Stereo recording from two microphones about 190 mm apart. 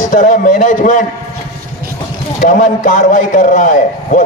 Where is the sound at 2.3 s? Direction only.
40° left (ahead or behind).